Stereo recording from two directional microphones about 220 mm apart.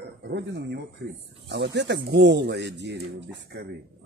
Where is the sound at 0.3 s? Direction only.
50° right (ahead or behind).